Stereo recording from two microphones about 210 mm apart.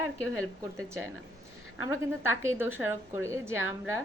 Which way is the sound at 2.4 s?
10° right (ahead or behind).